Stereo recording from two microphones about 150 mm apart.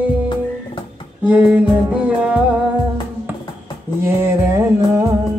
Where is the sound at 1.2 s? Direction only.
10° right (ahead or behind).